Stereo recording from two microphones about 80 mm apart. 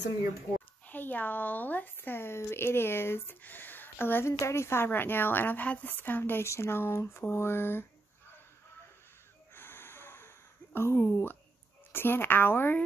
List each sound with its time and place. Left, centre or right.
0.8 s speech: left
9.5 s a sound: left
11.9 s speech: left